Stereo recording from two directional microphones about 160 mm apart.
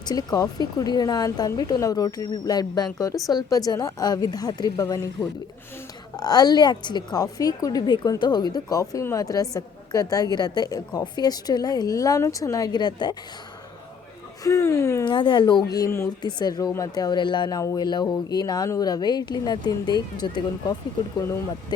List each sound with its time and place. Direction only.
0.0 s a woman's voice: 25° left (ahead or behind)
6.1 s a woman's voice: 25° left (ahead or behind)
14.4 s speech: 15° left (ahead or behind)
15.0 s a woman's voice: 30° left (ahead or behind)